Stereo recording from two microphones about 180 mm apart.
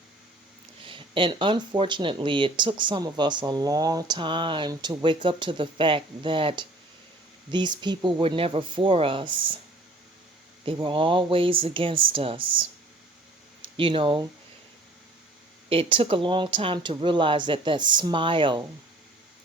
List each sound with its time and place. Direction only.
0.9 s speech: 30° right (ahead or behind)
10.7 s speech: 30° right (ahead or behind)
13.7 s speech: 30° right (ahead or behind)
15.7 s speech: 30° right (ahead or behind)